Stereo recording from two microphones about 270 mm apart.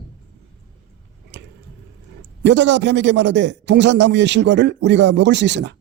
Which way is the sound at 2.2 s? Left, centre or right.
Right.